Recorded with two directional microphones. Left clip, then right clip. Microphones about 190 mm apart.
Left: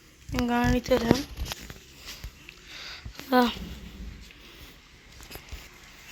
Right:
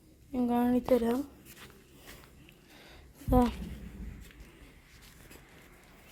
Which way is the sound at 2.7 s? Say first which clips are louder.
Left 15 dB; 25° right (ahead or behind).